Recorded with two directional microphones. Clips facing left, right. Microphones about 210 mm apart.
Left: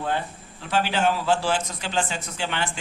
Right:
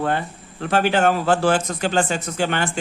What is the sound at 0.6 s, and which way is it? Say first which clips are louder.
A man's voice: right 5 dB; 55° right (ahead or behind).